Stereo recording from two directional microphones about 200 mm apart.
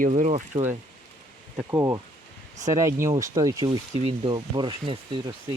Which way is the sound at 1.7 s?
15° right (ahead or behind).